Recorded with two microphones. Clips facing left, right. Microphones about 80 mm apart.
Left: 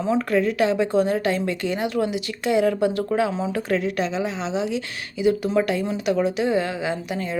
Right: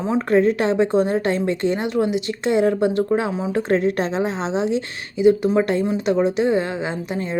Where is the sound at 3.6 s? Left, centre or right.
Right.